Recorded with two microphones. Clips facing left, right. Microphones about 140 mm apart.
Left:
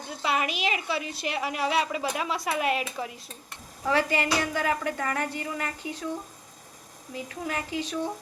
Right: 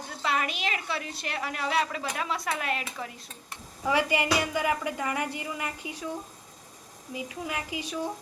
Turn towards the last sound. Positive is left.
turn(degrees=-10)  # may be behind; listen again after turning